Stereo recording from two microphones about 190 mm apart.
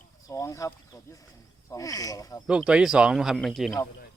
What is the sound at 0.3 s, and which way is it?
Speech, 15° left (ahead or behind).